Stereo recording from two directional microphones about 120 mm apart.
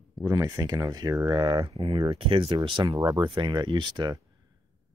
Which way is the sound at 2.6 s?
40° right (ahead or behind).